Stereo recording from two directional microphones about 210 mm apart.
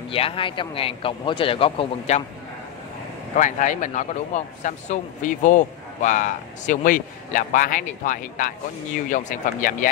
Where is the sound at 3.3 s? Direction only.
35° left (ahead or behind).